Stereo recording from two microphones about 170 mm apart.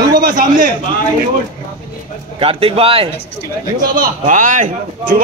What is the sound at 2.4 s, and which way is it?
Speech, 35° right (ahead or behind).